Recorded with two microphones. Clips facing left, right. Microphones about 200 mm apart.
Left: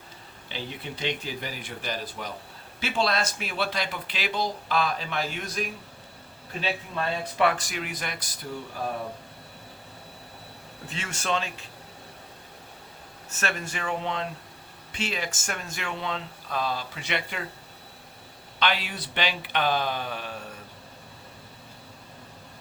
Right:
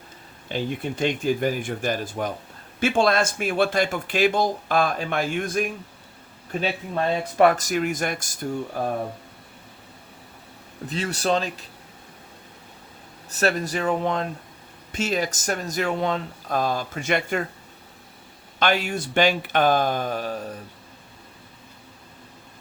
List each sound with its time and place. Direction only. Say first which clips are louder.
0.4 s speech: right 9 dB; 50° right (ahead or behind)
10.8 s speech: right 7 dB; 40° right (ahead or behind)
13.3 s speech: right 9 dB; 35° right (ahead or behind)
18.6 s speech: right 6 dB; 45° right (ahead or behind)